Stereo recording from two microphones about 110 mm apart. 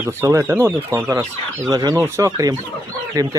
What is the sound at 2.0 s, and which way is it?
Speech, 25° right (ahead or behind).